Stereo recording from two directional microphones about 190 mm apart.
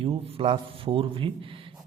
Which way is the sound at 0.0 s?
30° right (ahead or behind).